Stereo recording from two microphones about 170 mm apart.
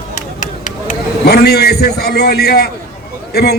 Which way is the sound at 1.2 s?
70° left (ahead or behind).